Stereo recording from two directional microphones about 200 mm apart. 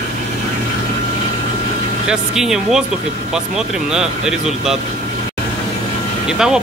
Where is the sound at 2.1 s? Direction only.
Centre (ahead or behind).